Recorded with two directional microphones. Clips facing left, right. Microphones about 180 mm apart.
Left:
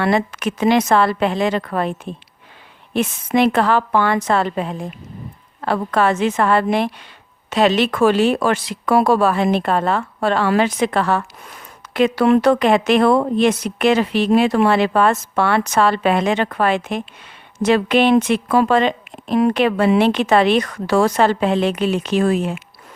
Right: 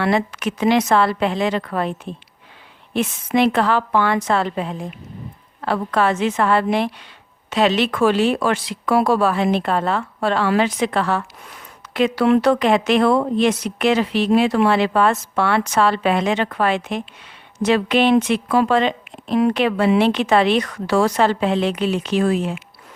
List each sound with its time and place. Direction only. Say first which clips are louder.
0.0 s a woman's voice: left 1 dB; 45° left (ahead or behind)
2.9 s a woman's voice: left 1 dB; 50° left (ahead or behind)